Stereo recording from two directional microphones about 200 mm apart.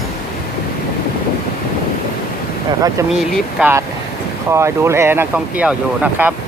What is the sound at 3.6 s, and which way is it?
Speech, 10° right (ahead or behind).